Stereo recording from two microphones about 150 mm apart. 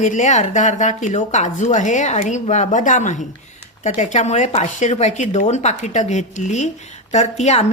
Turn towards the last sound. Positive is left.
turn(degrees=50)  # may be behind; listen again after turning